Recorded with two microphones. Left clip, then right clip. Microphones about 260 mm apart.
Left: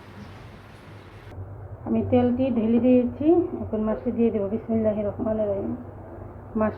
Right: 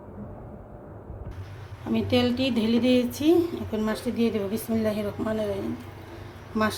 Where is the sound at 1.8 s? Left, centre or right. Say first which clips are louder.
Left 2 dB; right.